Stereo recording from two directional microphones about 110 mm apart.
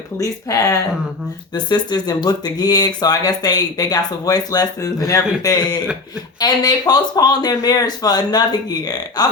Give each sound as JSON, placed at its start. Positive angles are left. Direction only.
{"t": 0.2, "sound": "speech", "side_deg": 30}
{"t": 1.5, "sound": "speech", "side_deg": 40}